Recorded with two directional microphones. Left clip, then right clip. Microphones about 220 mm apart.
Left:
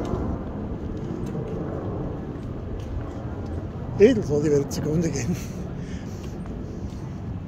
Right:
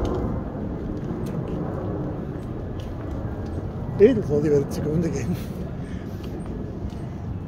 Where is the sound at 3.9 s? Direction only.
20° left (ahead or behind).